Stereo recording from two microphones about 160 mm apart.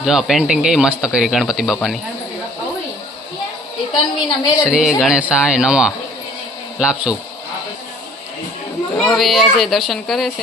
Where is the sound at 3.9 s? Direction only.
30° left (ahead or behind).